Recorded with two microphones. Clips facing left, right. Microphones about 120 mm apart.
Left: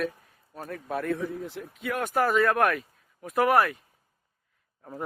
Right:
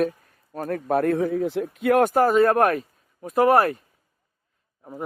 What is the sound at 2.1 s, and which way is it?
A man's voice, 30° right (ahead or behind).